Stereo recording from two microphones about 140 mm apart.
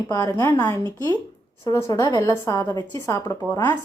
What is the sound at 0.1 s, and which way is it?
A woman's voice, 20° left (ahead or behind).